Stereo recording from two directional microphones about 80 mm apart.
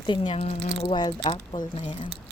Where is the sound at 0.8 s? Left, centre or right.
Left.